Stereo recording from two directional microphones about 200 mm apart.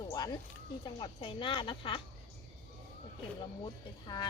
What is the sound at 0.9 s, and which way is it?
Speech, 25° left (ahead or behind).